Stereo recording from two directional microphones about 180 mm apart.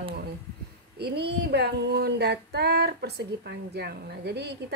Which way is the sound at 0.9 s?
65° right (ahead or behind).